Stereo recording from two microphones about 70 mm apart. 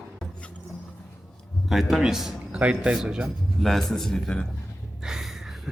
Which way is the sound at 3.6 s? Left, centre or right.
Centre.